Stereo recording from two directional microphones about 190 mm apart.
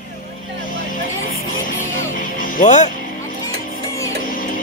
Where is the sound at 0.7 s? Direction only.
45° left (ahead or behind).